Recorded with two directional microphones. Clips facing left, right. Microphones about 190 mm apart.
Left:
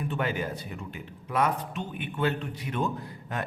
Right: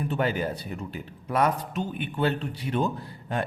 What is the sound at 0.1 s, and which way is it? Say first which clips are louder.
A man's voice: right 4 dB; 35° right (ahead or behind).